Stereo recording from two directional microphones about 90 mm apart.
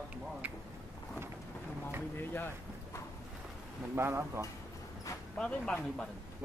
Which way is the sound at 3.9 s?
30° right (ahead or behind).